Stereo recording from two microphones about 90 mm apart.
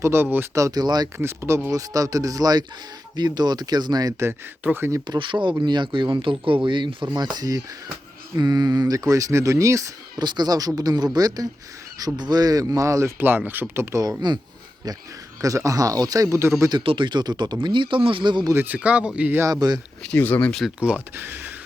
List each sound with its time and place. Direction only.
0.0 s speech: 25° right (ahead or behind)
0.5 s speech: 40° right (ahead or behind)
1.2 s speech: 30° right (ahead or behind); by 4.1 s 50° right (ahead or behind)
4.2 s speech: 25° right (ahead or behind)
5.0 s speech: 60° right (ahead or behind); by 9.9 s 35° right (ahead or behind)
10.2 s speech: 50° right (ahead or behind); by 13.8 s 20° right (ahead or behind)
13.9 s speech: 35° right (ahead or behind)
15.4 s speech: 40° right (ahead or behind)
16.8 s speech: 70° right (ahead or behind)
18.5 s speech: 20° right (ahead or behind)
19.5 s speech: 50° right (ahead or behind)
20.0 s speech: 15° left (ahead or behind)
20.5 s speech: centre (ahead or behind)
20.7 s speech: 15° right (ahead or behind)